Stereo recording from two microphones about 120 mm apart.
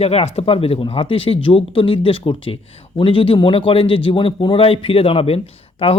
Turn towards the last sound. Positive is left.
turn(degrees=55)  # may be behind; listen again after turning